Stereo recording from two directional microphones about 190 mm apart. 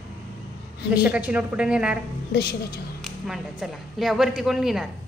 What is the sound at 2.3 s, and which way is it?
Speech, 55° left (ahead or behind).